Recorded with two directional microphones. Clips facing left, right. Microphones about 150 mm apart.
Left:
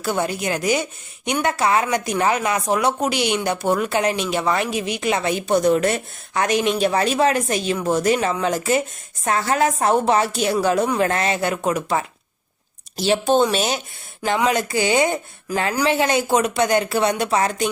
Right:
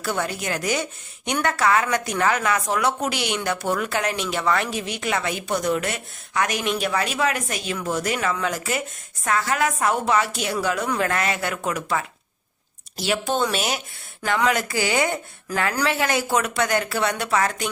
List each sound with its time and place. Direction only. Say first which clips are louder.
0.0 s a woman's voice: left 4 dB; 15° left (ahead or behind)